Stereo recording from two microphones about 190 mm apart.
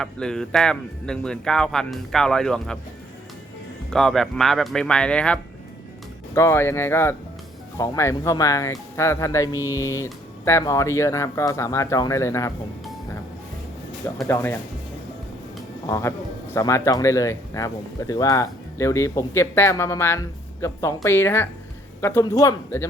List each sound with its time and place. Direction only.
0.0 s speech: 5° left (ahead or behind)
3.8 s a man's voice: centre (ahead or behind)
14.3 s a man's voice: 10° left (ahead or behind)
15.9 s a man's voice: 15° left (ahead or behind)